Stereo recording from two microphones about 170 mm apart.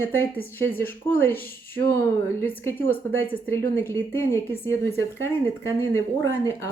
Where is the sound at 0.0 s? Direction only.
15° left (ahead or behind).